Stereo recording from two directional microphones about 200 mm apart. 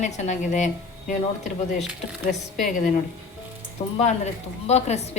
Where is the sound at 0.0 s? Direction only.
35° left (ahead or behind).